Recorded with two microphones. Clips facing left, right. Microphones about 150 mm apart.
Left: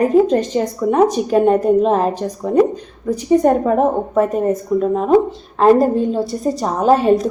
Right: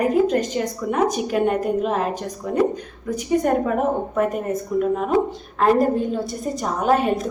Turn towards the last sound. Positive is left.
turn(degrees=30)  # may be behind; listen again after turning